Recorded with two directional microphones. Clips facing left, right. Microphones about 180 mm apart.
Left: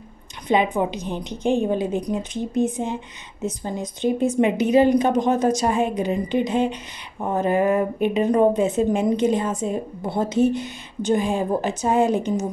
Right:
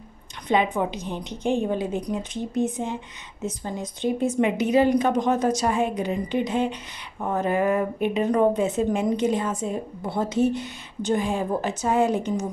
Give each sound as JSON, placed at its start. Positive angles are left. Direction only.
{"t": 0.5, "sound": "a woman's voice", "side_deg": 15}